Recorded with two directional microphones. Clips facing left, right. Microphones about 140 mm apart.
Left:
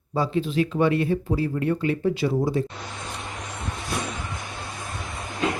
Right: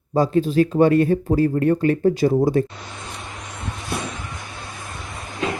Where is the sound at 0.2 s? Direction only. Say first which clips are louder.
Right 6 dB; 40° right (ahead or behind).